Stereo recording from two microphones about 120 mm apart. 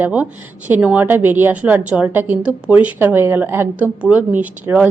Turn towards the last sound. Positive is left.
turn(degrees=-15)  # may be behind; listen again after turning